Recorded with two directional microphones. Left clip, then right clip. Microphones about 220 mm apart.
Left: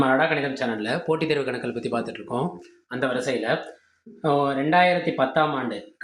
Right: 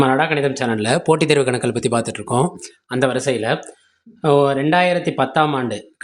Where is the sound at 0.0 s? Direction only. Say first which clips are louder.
Right 5 dB; 45° right (ahead or behind).